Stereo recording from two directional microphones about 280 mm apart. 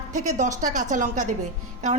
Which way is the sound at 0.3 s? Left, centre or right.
Right.